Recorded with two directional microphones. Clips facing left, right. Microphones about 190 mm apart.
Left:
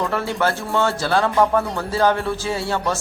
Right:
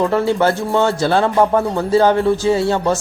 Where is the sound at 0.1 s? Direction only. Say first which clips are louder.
Right 6 dB; 20° right (ahead or behind).